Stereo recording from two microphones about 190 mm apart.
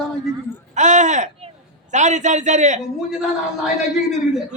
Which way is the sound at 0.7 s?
40° right (ahead or behind).